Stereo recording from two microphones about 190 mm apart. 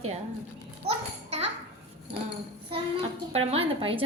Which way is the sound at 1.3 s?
35° right (ahead or behind).